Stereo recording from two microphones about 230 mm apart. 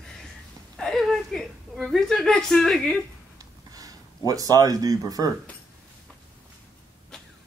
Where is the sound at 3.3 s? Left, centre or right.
Centre.